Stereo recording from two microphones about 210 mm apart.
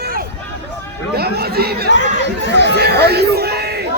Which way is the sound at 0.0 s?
45° right (ahead or behind).